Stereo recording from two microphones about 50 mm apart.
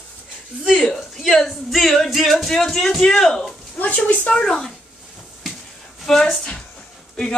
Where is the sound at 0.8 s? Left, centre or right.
Centre.